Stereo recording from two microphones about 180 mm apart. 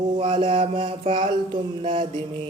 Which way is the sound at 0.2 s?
30° right (ahead or behind).